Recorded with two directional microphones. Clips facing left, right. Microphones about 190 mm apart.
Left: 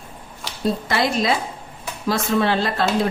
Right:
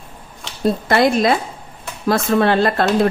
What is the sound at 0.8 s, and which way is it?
Speech, 55° right (ahead or behind).